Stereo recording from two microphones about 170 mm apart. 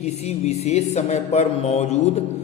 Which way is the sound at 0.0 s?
40° left (ahead or behind).